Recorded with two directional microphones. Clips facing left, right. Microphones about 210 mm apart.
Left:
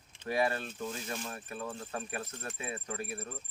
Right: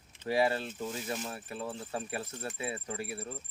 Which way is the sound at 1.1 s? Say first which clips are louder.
Right 2 dB; 20° right (ahead or behind).